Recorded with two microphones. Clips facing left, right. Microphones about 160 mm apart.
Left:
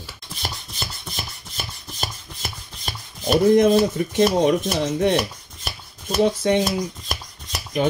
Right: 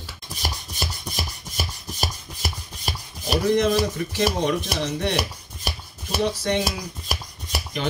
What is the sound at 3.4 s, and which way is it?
Speech, 50° left (ahead or behind).